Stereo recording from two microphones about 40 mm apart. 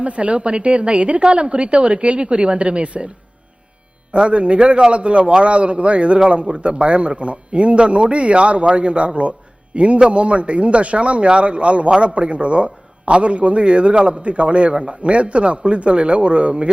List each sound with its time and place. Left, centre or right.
0.0 s a man's voice: right
4.1 s a man's voice: right